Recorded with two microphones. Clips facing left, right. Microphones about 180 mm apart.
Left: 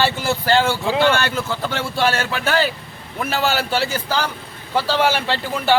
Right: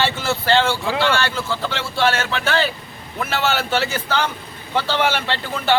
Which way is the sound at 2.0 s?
40° left (ahead or behind).